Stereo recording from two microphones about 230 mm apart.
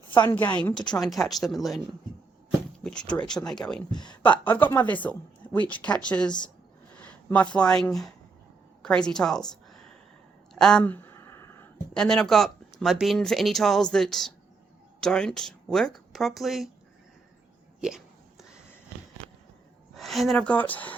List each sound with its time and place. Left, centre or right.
0.1 s a woman's voice: centre
0.3 s speech: centre
2.8 s speech: centre
3.9 s speech: centre
4.2 s speech: centre
7.0 s a sound: centre
7.5 s speech: centre
10.5 s a sound: centre
12.8 s speech: centre
17.7 s hiccup: centre
19.9 s speech: centre